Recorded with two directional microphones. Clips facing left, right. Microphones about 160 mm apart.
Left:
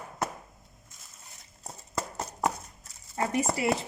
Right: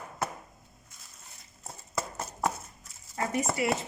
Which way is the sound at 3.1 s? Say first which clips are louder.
Left 1 dB; 30° left (ahead or behind).